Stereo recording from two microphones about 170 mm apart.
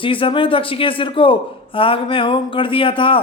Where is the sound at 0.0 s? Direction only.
30° left (ahead or behind).